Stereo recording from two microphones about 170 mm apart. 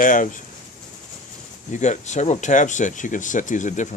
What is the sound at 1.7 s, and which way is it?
Speech, 45° left (ahead or behind).